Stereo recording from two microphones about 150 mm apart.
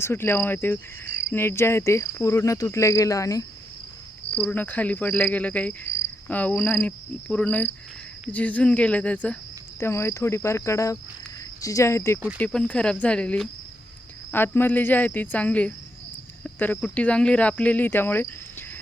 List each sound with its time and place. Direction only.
0.0 s cricket: 15° left (ahead or behind)
4.4 s cricket: 10° left (ahead or behind)
12.4 s cricket: 5° left (ahead or behind)